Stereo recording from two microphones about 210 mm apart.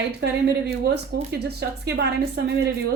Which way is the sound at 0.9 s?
50° right (ahead or behind).